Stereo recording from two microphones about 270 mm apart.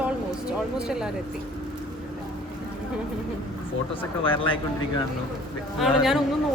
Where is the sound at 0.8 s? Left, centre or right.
Centre.